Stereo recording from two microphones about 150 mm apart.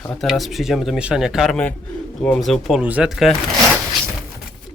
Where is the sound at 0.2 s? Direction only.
Centre (ahead or behind).